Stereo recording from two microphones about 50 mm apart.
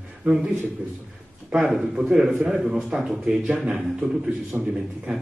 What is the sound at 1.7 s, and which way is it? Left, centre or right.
Speech, centre.